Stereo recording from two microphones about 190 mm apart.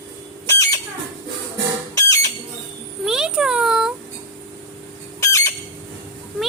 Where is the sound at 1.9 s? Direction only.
15° left (ahead or behind).